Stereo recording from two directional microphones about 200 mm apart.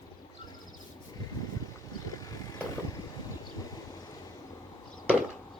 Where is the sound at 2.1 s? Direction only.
20° left (ahead or behind).